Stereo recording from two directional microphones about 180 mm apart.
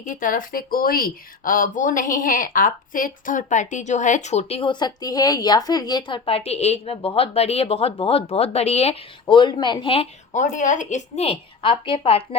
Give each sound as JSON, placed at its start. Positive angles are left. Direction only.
{"t": 0.0, "sound": "speech", "side_deg": 45}
{"t": 10.3, "sound": "speech", "side_deg": 45}